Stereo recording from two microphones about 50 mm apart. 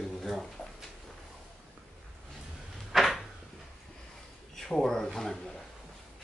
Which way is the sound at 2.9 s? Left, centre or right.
Centre.